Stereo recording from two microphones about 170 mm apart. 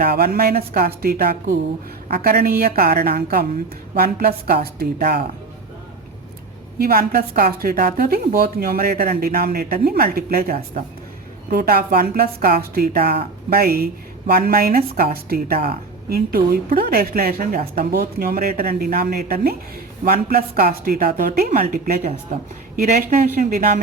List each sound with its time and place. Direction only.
0.0 s a woman's voice: 65° right (ahead or behind)
6.7 s a woman's voice: 65° right (ahead or behind)